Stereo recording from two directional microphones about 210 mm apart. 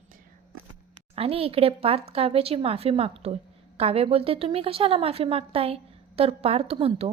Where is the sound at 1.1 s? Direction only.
30° right (ahead or behind).